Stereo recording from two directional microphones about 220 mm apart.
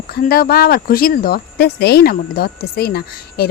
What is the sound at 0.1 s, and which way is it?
Speech, 40° left (ahead or behind).